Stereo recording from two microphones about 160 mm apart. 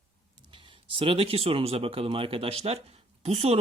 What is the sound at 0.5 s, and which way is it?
Speech, 30° right (ahead or behind).